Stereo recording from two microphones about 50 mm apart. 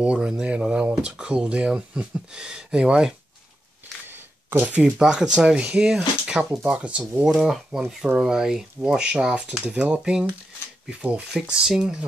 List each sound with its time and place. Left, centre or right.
0.0 s speech: right
4.1 s a sound: right
4.7 s speech: right
7.4 s speech: centre; by 11.4 s right
11.6 s speech: centre